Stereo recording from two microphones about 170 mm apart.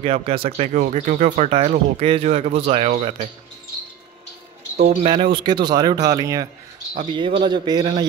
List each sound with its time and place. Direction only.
0.0 s speech: 35° right (ahead or behind)
0.7 s speech: 45° right (ahead or behind)
4.7 s speech: 40° right (ahead or behind)